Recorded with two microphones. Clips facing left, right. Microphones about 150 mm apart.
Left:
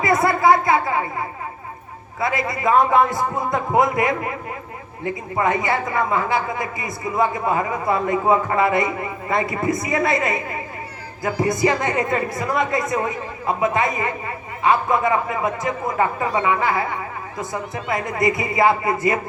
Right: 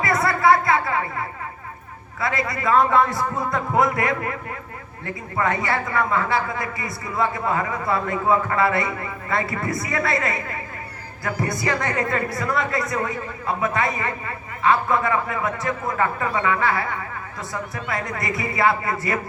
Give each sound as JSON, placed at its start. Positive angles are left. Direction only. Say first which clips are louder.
{"t": 0.0, "sound": "a woman's voice", "louder": "left 3 dB", "side_deg": 20}